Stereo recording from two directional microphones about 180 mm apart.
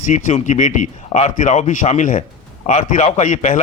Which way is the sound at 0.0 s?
45° left (ahead or behind).